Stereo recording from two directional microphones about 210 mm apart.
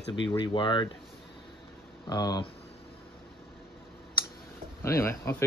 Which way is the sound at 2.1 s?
20° left (ahead or behind).